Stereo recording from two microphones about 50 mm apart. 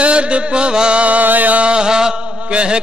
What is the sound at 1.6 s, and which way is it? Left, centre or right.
Chant, centre.